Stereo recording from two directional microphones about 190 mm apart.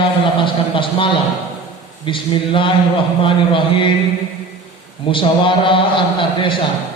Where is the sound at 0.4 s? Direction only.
25° left (ahead or behind).